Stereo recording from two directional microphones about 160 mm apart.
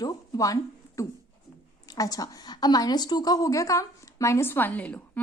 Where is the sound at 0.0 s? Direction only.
20° left (ahead or behind).